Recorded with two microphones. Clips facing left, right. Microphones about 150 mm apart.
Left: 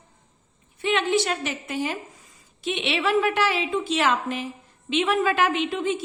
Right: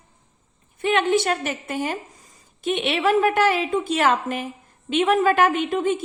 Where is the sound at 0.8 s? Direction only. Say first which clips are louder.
Right 3 dB; 50° right (ahead or behind).